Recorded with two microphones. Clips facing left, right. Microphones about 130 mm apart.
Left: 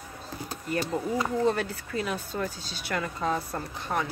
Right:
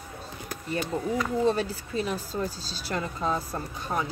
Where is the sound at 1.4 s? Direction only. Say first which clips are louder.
Right 1 dB; 30° right (ahead or behind).